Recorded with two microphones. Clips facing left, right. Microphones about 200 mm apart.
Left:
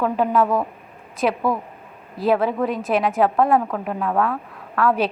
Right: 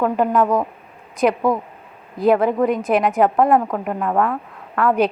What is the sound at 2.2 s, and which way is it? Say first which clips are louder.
Speech: right 5 dB; 20° right (ahead or behind).